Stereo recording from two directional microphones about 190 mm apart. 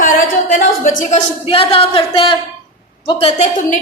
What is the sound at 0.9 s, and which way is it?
Speech, 45° left (ahead or behind).